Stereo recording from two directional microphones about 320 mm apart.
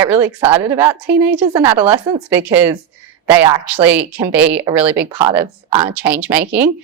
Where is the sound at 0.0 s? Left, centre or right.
Centre.